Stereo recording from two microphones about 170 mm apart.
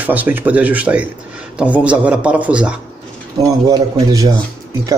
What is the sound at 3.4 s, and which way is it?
Speech, 20° right (ahead or behind).